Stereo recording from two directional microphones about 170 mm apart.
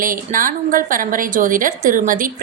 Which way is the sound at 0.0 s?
55° right (ahead or behind).